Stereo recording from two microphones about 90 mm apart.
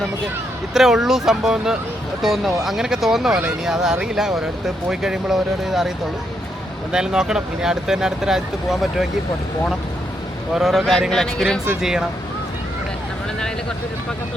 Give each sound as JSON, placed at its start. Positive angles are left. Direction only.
{"t": 0.7, "sound": "speech", "side_deg": -5}
{"t": 6.9, "sound": "speech", "side_deg": -10}
{"t": 10.5, "sound": "speech", "side_deg": -5}
{"t": 11.8, "sound": "speech", "side_deg": -5}